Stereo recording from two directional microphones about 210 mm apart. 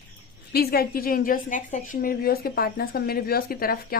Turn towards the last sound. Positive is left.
turn(degrees=45)  # may be behind; listen again after turning